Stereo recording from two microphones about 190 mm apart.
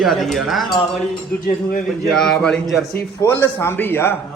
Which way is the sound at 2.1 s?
5° left (ahead or behind).